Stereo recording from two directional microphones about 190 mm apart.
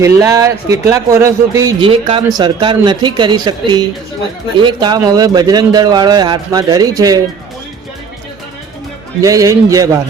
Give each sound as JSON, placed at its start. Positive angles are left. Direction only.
{"t": 0.0, "sound": "a man's voice", "side_deg": -15}
{"t": 9.2, "sound": "a man's voice", "side_deg": -15}